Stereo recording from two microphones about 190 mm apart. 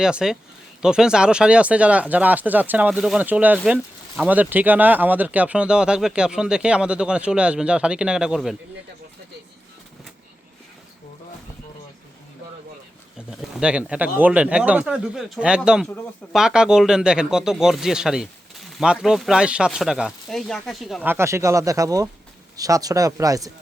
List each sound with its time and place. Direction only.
0.0 s speech: 5° right (ahead or behind)
13.1 s speech: 5° right (ahead or behind)
21.1 s speech: 15° right (ahead or behind)